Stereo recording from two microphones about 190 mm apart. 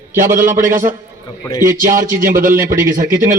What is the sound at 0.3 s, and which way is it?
A man's voice, 45° right (ahead or behind).